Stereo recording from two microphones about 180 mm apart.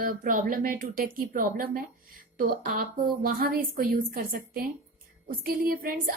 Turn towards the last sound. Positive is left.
turn(degrees=-55)  # may be behind; listen again after turning